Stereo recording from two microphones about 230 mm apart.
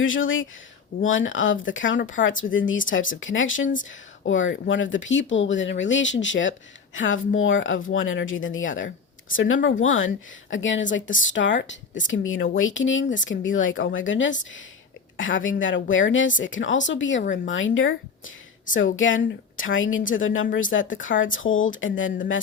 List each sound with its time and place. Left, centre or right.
0.0 s a woman's voice: left
18.9 s a woman's voice: left